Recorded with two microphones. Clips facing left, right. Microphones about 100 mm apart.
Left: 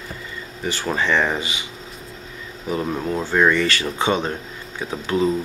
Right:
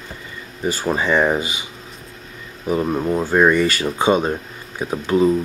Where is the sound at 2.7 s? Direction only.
10° right (ahead or behind).